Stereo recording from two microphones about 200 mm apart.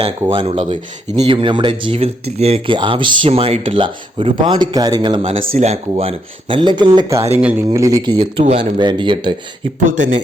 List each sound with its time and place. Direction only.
0.3 s speech: 25° right (ahead or behind)
7.3 s speech: 5° right (ahead or behind)
7.7 s speech: 15° right (ahead or behind)
9.8 s speech: 35° right (ahead or behind)